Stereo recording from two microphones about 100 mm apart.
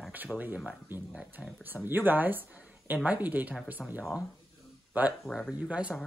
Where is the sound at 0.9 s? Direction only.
20° right (ahead or behind).